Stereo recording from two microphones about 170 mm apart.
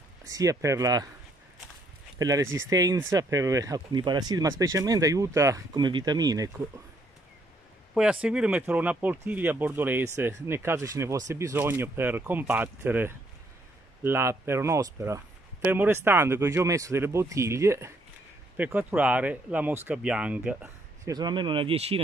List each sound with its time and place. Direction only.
0.2 s speech: 20° right (ahead or behind)
2.1 s speech: 20° right (ahead or behind)
7.9 s speech: 5° right (ahead or behind); by 22.0 s 35° right (ahead or behind)